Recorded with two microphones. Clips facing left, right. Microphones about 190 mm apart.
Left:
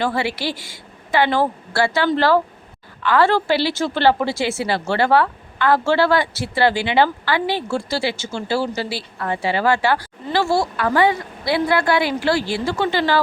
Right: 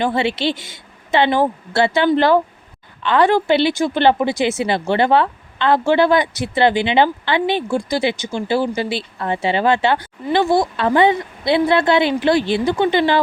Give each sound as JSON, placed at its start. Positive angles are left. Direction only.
{"t": 0.0, "sound": "a woman's voice", "side_deg": -20}